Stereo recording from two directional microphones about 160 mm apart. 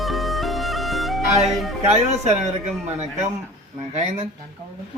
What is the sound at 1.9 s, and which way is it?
Speech, 45° right (ahead or behind).